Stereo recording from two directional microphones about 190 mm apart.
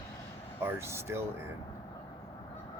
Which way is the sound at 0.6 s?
15° right (ahead or behind).